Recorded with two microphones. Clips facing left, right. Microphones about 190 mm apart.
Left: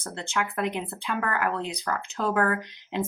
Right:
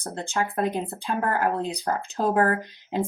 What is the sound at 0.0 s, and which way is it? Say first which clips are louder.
Speech: right 3 dB; 35° right (ahead or behind).